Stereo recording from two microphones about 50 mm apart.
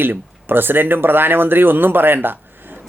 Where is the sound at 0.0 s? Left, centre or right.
Right.